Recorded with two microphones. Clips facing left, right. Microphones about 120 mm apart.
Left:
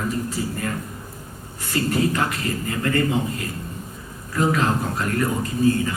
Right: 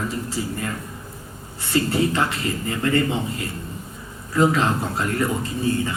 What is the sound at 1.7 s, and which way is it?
A man's voice, 25° right (ahead or behind).